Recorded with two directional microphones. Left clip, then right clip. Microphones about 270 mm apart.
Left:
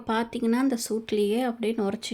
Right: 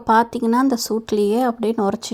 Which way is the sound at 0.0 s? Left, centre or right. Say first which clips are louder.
Right 11 dB; centre.